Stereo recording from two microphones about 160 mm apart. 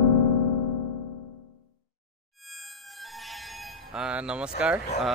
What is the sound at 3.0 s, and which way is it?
Music, centre (ahead or behind).